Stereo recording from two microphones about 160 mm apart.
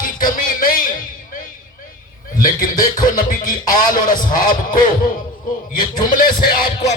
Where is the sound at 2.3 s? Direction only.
60° left (ahead or behind).